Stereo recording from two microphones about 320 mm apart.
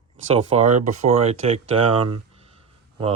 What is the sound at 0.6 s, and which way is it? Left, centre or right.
Speech, right.